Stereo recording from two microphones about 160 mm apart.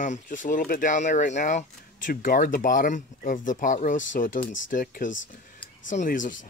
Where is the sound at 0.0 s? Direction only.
50° left (ahead or behind).